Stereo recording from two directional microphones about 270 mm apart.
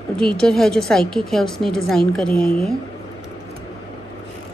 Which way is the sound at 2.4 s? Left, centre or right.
Left.